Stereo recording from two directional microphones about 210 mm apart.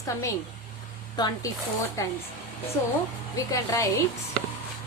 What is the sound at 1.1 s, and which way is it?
A woman's voice, 20° left (ahead or behind).